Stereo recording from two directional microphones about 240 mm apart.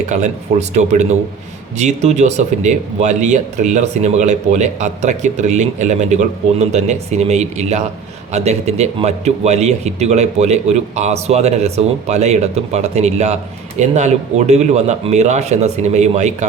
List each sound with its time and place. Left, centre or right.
0.1 s speech: right